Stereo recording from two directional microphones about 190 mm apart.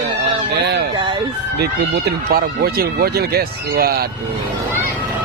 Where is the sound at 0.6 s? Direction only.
60° right (ahead or behind).